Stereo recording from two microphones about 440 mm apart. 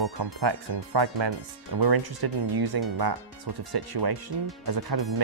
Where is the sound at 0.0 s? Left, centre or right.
Right.